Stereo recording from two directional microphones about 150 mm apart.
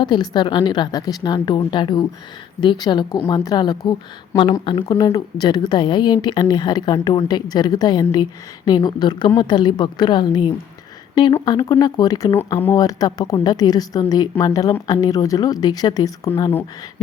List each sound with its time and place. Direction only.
0.0 s a woman's voice: 30° left (ahead or behind); by 12.7 s 15° left (ahead or behind)
12.7 s a woman's voice: 25° left (ahead or behind)